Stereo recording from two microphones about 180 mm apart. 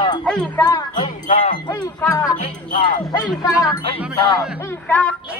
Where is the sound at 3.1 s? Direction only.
20° left (ahead or behind).